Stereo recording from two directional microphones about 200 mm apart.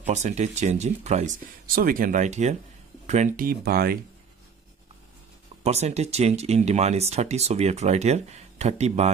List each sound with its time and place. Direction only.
0.0 s speech: 35° right (ahead or behind)
5.6 s speech: 35° right (ahead or behind)